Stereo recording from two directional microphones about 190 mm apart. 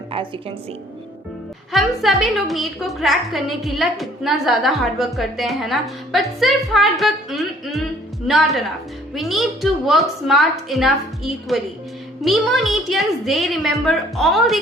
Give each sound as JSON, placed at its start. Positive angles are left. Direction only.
{"t": 0.1, "sound": "a woman's voice", "side_deg": -30}
{"t": 1.7, "sound": "a woman's voice", "side_deg": 0}